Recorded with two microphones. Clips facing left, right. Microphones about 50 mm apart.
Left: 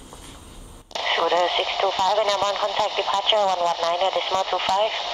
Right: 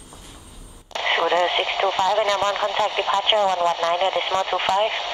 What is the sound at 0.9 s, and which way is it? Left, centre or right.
Speech, right.